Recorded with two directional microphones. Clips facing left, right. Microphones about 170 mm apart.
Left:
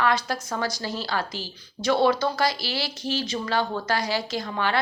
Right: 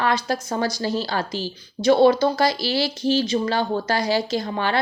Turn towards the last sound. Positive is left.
turn(degrees=-30)  # may be behind; listen again after turning